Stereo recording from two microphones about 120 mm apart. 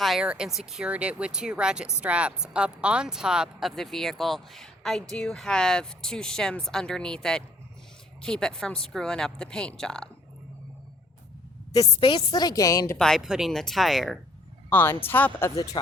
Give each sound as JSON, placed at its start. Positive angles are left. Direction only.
{"t": 0.0, "sound": "speech", "side_deg": -5}
{"t": 11.9, "sound": "a woman's voice", "side_deg": 40}
{"t": 13.0, "sound": "speech", "side_deg": 0}
{"t": 14.7, "sound": "speech", "side_deg": 15}